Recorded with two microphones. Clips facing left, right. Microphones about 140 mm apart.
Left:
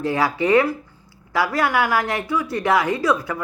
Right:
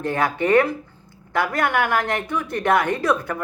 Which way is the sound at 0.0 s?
55° right (ahead or behind).